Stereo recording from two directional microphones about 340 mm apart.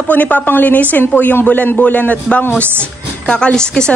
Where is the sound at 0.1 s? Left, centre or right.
Centre.